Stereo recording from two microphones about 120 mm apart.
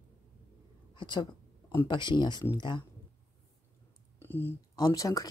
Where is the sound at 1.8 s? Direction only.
40° left (ahead or behind).